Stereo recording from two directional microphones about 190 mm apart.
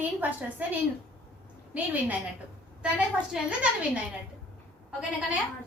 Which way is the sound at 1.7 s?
5° right (ahead or behind).